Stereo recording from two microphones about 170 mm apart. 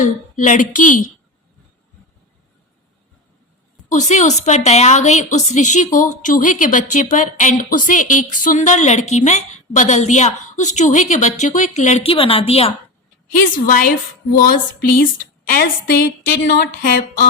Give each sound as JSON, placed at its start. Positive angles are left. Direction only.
{"t": 0.0, "sound": "a woman's voice", "side_deg": 50}
{"t": 3.8, "sound": "a woman's voice", "side_deg": 45}
{"t": 13.3, "sound": "a woman's voice", "side_deg": 55}